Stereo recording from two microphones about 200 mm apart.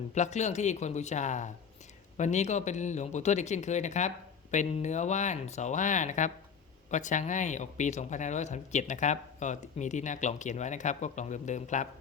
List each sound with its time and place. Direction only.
0.1 s speech: 35° left (ahead or behind)